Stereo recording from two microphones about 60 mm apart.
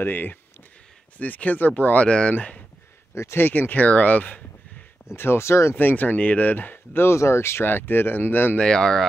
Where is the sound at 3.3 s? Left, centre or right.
Left.